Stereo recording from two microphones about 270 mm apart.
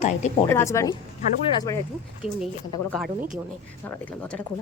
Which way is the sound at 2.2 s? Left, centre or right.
Centre.